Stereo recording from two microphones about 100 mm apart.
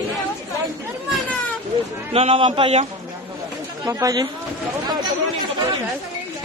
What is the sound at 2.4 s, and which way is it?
Speech, 65° right (ahead or behind).